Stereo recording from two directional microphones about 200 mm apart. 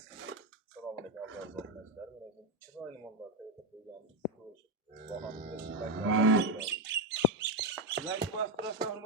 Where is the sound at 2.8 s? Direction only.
Centre (ahead or behind).